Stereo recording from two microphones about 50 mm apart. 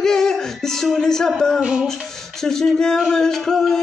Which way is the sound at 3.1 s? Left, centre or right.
Centre.